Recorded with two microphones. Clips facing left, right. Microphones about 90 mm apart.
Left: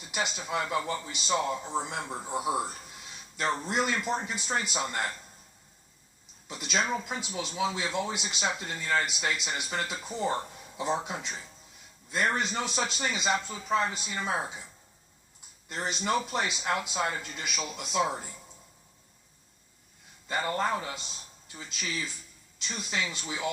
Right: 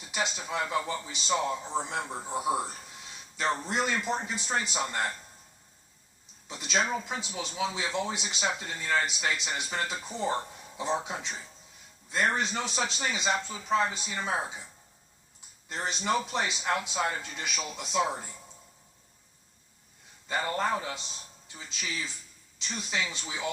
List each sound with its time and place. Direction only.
0.1 s speech: 5° left (ahead or behind)
6.5 s speech: 5° left (ahead or behind)
15.7 s speech: 5° left (ahead or behind)
20.2 s speech: centre (ahead or behind)
22.9 s speech: 5° right (ahead or behind)